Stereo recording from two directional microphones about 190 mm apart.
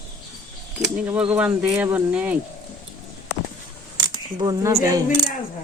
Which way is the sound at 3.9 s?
25° right (ahead or behind).